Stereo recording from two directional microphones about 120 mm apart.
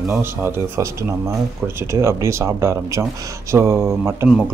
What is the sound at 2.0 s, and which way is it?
Speech, 25° right (ahead or behind).